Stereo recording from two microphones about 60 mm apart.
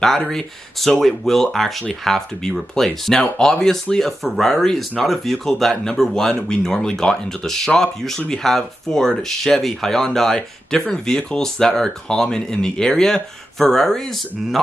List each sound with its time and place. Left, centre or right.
0.0 s speech: centre